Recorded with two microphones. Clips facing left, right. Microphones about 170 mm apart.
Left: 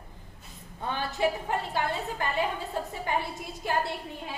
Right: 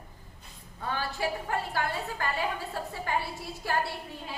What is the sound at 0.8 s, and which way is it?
A woman's voice, 20° left (ahead or behind).